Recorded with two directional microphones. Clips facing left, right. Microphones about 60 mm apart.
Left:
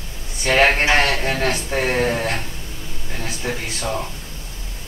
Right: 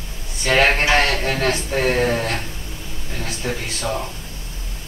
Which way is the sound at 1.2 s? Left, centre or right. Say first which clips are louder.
Right 1 dB; centre.